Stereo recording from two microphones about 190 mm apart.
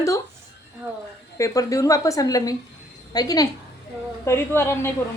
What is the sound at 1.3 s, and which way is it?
A woman's voice, 15° left (ahead or behind).